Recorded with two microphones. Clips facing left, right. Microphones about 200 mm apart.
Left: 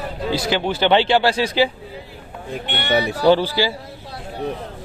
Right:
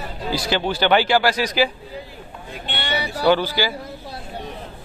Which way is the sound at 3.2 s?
30° left (ahead or behind).